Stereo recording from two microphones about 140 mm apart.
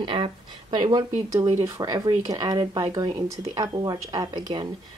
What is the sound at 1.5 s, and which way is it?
Speech, 20° right (ahead or behind).